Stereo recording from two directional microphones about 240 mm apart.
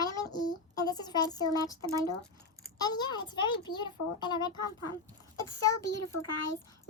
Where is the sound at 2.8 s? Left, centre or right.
Centre.